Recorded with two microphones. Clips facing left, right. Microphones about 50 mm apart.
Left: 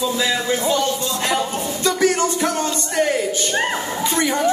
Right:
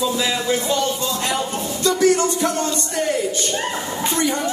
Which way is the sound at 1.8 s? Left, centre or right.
Left.